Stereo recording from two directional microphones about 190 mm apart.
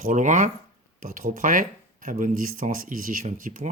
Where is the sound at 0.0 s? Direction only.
40° right (ahead or behind).